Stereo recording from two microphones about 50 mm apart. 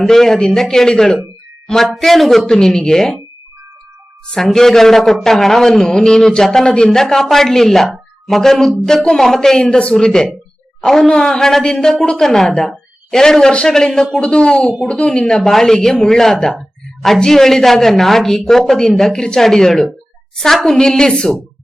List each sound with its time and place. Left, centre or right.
0.0 s a man's voice: centre
2.6 s speech: centre
4.3 s a man's voice: centre
11.1 s speech: centre
12.2 s a woman's voice: centre
14.2 s speech: left
15.4 s speech: centre